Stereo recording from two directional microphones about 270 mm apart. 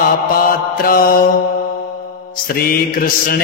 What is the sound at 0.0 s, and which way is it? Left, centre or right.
Mantra, left.